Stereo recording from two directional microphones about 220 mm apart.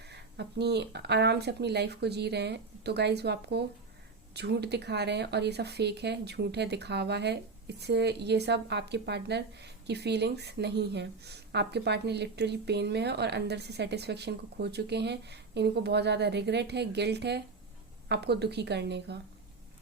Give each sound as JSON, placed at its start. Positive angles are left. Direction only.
{"t": 0.0, "sound": "speech", "side_deg": -50}